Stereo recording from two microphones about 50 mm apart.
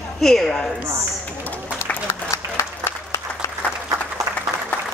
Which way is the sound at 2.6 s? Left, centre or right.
Left.